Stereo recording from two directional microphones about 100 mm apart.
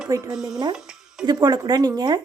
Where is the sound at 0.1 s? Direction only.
40° right (ahead or behind).